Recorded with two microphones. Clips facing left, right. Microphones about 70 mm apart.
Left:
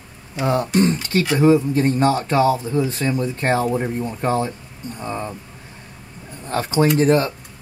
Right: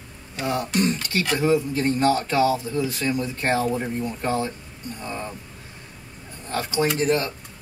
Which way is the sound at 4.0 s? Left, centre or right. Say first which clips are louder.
Left 4 dB; left.